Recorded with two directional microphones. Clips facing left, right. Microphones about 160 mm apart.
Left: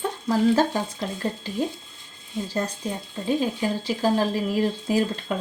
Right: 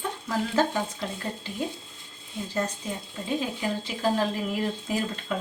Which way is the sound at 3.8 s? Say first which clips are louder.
Left 4 dB; 35° left (ahead or behind).